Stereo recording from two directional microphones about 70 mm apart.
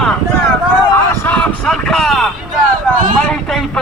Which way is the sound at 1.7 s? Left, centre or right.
Centre.